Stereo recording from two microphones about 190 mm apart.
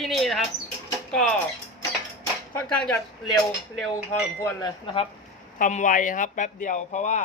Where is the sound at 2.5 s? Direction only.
5° left (ahead or behind).